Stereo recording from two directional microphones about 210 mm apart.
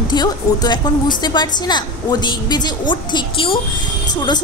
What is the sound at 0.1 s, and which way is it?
A woman's voice, 20° left (ahead or behind).